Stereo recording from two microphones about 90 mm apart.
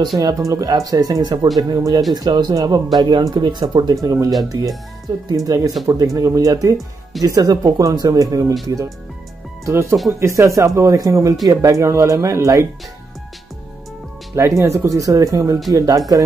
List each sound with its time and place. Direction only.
0.2 s speech: 40° right (ahead or behind); by 3.9 s 55° right (ahead or behind)
3.9 s speech: 40° right (ahead or behind)
14.3 s speech: 30° right (ahead or behind)